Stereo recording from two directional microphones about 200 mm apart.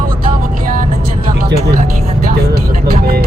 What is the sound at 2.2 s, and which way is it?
Music, 50° right (ahead or behind).